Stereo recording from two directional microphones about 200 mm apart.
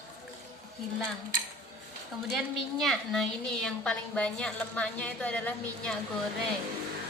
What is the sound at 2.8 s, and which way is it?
A woman's voice, centre (ahead or behind).